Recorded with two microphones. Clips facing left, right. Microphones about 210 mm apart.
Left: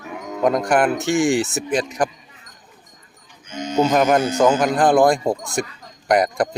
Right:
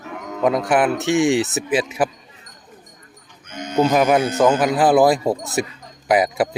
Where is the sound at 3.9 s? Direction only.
5° right (ahead or behind).